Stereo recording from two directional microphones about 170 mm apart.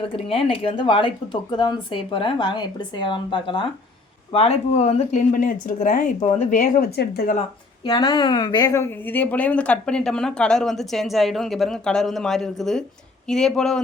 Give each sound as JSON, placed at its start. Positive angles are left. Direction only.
{"t": 0.0, "sound": "speech", "side_deg": 35}
{"t": 5.3, "sound": "speech", "side_deg": 50}
{"t": 7.9, "sound": "speech", "side_deg": 25}